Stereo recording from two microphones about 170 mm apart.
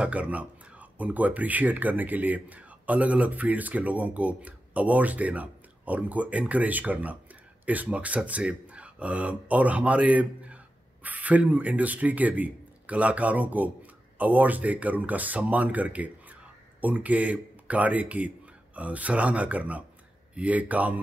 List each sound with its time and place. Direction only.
0.0 s speech: 10° right (ahead or behind)